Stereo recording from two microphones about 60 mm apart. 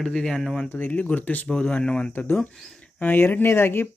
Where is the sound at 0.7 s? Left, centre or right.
Left.